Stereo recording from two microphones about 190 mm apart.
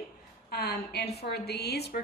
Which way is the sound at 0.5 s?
55° left (ahead or behind).